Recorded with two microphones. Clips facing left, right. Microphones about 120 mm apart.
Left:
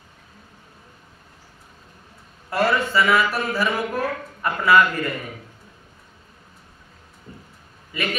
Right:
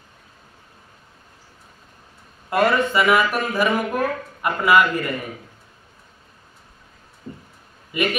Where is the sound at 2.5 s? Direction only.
20° right (ahead or behind).